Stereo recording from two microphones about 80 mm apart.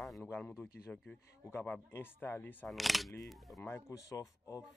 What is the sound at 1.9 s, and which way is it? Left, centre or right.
Speech, left.